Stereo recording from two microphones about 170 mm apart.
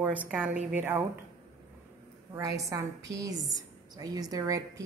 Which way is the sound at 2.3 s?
20° right (ahead or behind).